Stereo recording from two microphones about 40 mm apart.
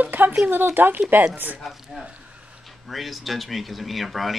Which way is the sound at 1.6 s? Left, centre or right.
Centre.